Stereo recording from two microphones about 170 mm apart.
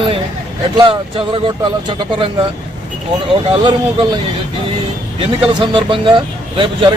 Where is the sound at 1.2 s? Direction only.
30° right (ahead or behind).